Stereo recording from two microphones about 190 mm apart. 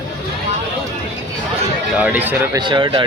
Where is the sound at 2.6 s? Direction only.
25° right (ahead or behind).